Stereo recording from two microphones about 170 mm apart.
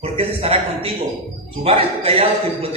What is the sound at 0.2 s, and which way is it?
A woman's voice, 35° right (ahead or behind).